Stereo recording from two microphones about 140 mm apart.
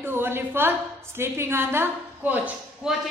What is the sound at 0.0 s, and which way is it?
A woman's voice, 15° right (ahead or behind).